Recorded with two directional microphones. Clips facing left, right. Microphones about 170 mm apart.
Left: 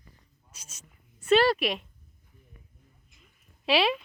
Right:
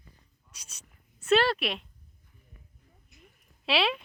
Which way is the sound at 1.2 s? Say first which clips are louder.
Left 2 dB; 5° left (ahead or behind).